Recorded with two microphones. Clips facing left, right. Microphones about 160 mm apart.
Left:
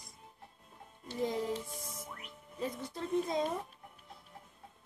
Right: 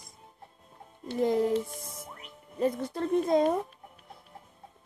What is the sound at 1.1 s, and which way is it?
Speech, 60° right (ahead or behind).